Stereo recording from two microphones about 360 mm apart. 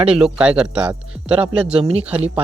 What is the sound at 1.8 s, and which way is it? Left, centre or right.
Speech, centre.